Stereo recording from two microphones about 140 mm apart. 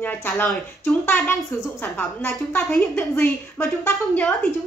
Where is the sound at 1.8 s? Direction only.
15° left (ahead or behind).